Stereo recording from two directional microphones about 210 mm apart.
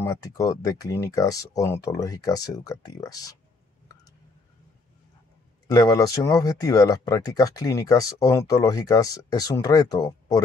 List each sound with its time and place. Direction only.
0.0 s speech: 15° left (ahead or behind)
5.8 s speech: 15° left (ahead or behind)